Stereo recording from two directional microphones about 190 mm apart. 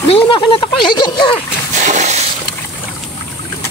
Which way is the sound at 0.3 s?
25° left (ahead or behind).